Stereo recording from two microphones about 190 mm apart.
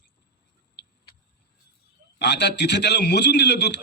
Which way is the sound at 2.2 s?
65° left (ahead or behind).